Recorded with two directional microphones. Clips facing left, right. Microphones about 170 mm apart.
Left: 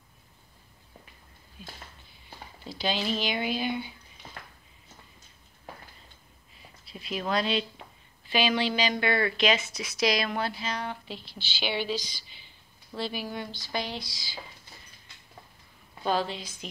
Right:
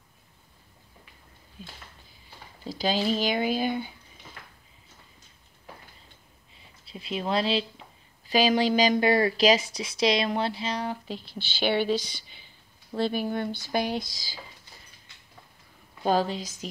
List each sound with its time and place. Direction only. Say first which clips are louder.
2.6 s speech: right 4 dB; 40° right (ahead or behind)
6.9 s speech: right 2 dB; 30° right (ahead or behind)
11.3 s speech: right 6 dB; 55° right (ahead or behind)
16.0 s speech: right 4 dB; 45° right (ahead or behind)